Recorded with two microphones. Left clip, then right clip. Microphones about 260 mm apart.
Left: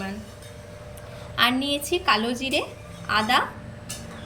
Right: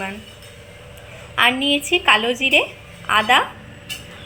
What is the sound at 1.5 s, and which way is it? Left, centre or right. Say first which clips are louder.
Speech: right 7 dB; centre.